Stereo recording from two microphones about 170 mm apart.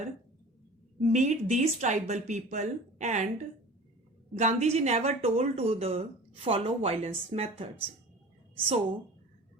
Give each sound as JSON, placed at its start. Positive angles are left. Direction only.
{"t": 0.9, "sound": "a woman's voice", "side_deg": -45}
{"t": 4.4, "sound": "a woman's voice", "side_deg": -40}